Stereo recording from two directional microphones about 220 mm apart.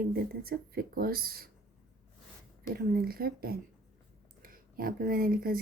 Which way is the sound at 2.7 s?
40° right (ahead or behind).